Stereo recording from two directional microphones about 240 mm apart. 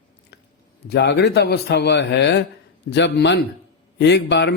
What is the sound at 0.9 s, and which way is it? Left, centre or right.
A man's voice, left.